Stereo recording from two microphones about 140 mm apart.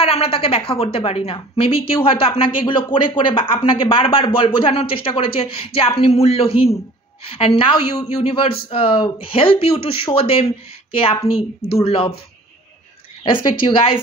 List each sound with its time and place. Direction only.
0.0 s a woman's voice: 45° left (ahead or behind)
13.2 s a woman's voice: 35° left (ahead or behind)